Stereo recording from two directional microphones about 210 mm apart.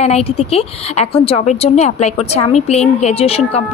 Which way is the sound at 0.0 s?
30° left (ahead or behind).